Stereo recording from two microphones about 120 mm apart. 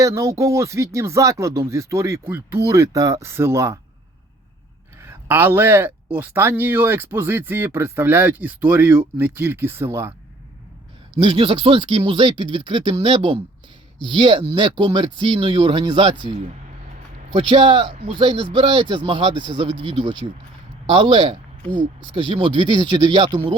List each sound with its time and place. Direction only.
0.0 s speech: 25° right (ahead or behind)
4.9 s speech: 20° right (ahead or behind)
11.2 s speech: 45° right (ahead or behind)
17.3 s speech: 45° right (ahead or behind)